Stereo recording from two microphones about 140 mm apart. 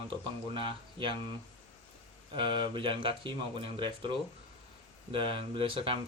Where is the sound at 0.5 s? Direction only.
35° right (ahead or behind).